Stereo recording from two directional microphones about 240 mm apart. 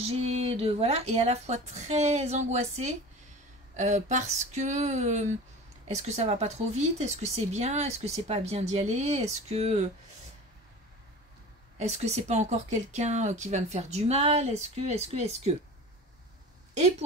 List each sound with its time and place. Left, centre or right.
0.0 s speech: right
11.8 s speech: right